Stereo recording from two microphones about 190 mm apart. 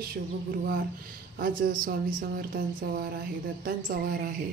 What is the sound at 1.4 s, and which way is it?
A woman's voice, 50° right (ahead or behind).